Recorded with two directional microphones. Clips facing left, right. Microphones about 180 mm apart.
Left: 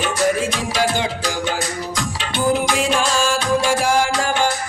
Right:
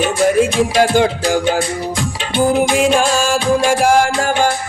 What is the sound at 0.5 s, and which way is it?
Music, 50° right (ahead or behind).